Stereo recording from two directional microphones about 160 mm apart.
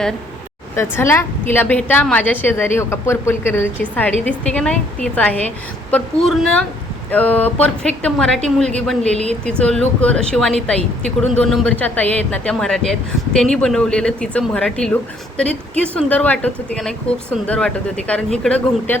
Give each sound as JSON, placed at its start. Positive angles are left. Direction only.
{"t": 0.8, "sound": "a woman's voice", "side_deg": 15}
{"t": 16.0, "sound": "a woman's voice", "side_deg": 10}